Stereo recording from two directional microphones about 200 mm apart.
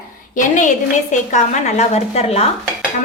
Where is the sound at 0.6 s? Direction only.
40° left (ahead or behind).